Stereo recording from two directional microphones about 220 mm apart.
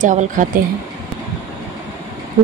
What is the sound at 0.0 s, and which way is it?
Speech, 35° right (ahead or behind).